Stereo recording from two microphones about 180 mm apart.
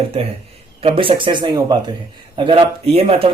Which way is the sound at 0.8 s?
30° right (ahead or behind).